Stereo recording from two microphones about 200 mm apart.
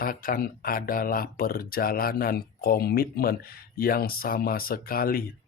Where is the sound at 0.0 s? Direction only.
45° left (ahead or behind).